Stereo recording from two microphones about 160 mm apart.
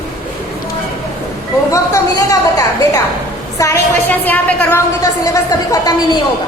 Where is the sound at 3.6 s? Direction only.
15° left (ahead or behind).